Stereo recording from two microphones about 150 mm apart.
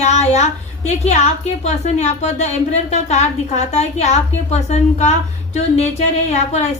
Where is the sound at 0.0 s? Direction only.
50° left (ahead or behind).